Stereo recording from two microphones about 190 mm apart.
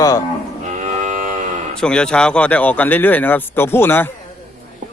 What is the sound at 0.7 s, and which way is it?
Cattle, 40° right (ahead or behind).